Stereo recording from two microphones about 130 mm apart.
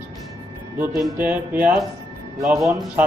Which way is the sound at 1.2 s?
15° right (ahead or behind).